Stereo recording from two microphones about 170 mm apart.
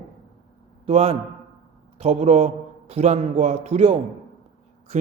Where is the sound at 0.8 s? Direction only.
35° right (ahead or behind).